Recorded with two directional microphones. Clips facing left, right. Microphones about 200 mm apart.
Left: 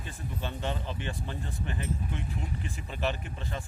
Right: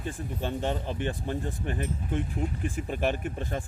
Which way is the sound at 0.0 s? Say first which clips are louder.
Right 5 dB; 45° right (ahead or behind).